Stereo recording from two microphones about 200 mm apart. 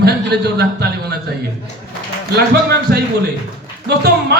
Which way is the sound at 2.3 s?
55° right (ahead or behind).